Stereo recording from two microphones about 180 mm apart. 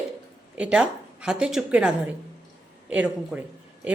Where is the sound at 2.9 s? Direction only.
10° right (ahead or behind).